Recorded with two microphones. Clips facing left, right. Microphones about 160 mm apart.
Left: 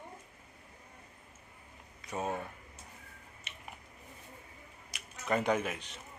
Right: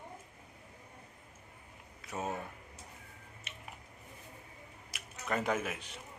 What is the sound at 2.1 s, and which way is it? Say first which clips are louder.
Speech: left 2 dB; 5° right (ahead or behind).